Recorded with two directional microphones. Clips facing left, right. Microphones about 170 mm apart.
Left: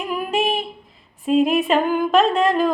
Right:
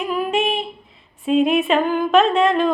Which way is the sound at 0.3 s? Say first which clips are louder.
Left 2 dB; centre (ahead or behind).